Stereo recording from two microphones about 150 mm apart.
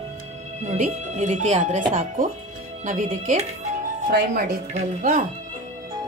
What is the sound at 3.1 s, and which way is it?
Music, 45° right (ahead or behind).